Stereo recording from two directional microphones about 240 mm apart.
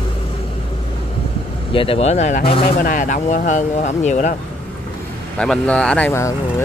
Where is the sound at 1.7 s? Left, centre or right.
Left.